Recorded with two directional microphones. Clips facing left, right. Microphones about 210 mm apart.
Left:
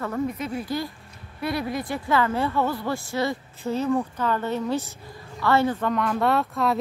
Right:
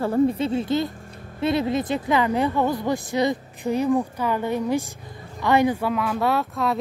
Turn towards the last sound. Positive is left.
turn(degrees=0)  # may be behind; listen again after turning